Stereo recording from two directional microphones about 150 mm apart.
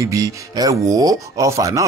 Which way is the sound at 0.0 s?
20° right (ahead or behind).